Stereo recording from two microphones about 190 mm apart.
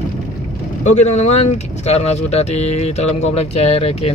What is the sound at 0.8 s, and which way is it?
Speech, 35° left (ahead or behind).